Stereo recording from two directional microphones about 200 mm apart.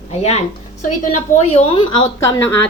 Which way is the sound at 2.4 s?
10° left (ahead or behind).